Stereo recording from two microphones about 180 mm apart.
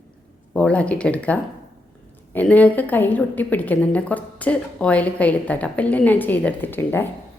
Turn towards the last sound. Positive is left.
turn(degrees=10)  # may be behind; listen again after turning